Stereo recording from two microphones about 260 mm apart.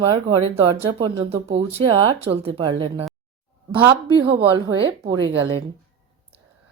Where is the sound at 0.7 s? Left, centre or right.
Right.